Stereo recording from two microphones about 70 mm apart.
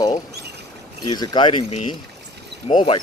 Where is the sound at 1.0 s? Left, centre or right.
Left.